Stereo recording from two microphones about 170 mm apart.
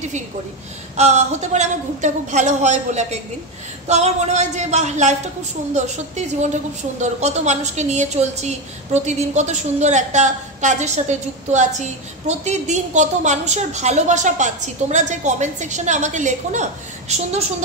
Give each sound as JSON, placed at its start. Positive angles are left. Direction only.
{"t": 0.9, "sound": "a woman's voice", "side_deg": -40}